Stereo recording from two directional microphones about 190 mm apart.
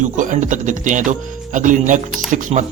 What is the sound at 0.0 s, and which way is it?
A man's voice, 40° right (ahead or behind).